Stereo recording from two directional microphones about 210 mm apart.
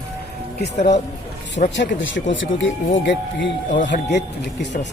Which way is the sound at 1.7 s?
60° left (ahead or behind).